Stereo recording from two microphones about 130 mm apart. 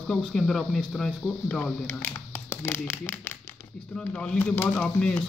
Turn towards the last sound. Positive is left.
turn(degrees=10)  # may be behind; listen again after turning